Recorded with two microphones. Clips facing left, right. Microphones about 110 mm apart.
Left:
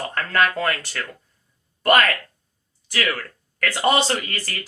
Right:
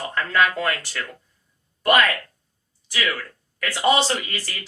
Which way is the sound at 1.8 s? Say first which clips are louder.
Left 1 dB; 50° left (ahead or behind).